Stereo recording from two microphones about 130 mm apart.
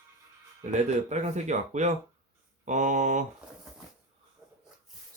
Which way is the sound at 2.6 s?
65° right (ahead or behind).